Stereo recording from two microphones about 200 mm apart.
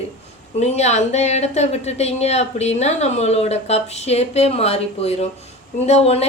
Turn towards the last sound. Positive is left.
turn(degrees=30)  # may be behind; listen again after turning